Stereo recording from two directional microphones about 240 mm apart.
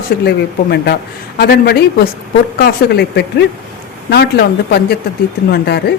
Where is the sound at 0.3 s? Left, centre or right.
Left.